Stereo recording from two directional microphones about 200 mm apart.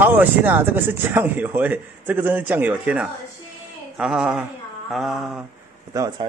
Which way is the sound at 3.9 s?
5° right (ahead or behind).